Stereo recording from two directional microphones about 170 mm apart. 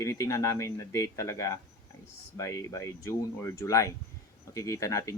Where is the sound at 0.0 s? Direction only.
20° left (ahead or behind).